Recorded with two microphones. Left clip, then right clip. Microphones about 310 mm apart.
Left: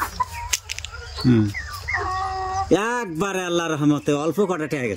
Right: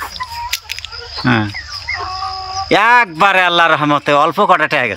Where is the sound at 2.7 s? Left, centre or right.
Right.